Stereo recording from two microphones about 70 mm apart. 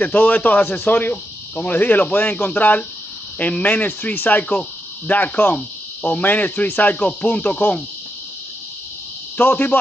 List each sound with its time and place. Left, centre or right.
0.0 s speech: left
9.4 s speech: left